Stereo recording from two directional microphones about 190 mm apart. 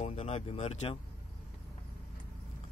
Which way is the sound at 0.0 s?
35° left (ahead or behind).